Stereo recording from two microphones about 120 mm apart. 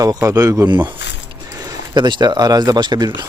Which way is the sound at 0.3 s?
30° right (ahead or behind).